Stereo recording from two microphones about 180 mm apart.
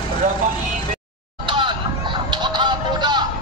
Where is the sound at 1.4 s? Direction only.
25° right (ahead or behind).